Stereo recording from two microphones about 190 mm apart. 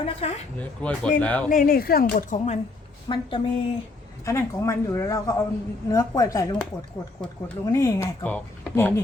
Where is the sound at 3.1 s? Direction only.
25° left (ahead or behind).